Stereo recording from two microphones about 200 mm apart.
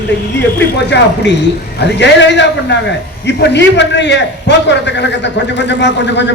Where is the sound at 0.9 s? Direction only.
60° left (ahead or behind).